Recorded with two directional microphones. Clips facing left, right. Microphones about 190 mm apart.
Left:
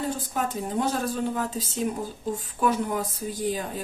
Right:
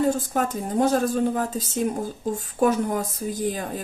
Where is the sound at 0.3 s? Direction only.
45° right (ahead or behind).